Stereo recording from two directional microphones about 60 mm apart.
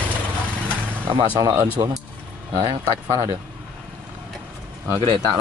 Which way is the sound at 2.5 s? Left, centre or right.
Right.